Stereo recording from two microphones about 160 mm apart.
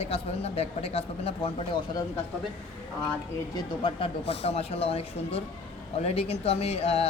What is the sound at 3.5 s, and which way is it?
Speech, 35° left (ahead or behind).